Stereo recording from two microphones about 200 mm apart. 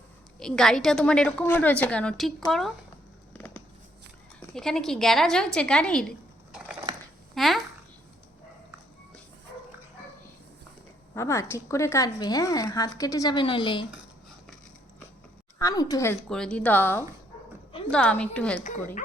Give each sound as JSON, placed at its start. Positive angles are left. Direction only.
{"t": 0.3, "sound": "a woman's voice", "side_deg": 0}
{"t": 3.3, "sound": "a sound", "side_deg": 10}
{"t": 4.4, "sound": "a woman's voice", "side_deg": 5}
{"t": 11.1, "sound": "speech", "side_deg": 15}
{"t": 15.5, "sound": "a woman's voice", "side_deg": 15}
{"t": 16.3, "sound": "a woman's voice", "side_deg": 5}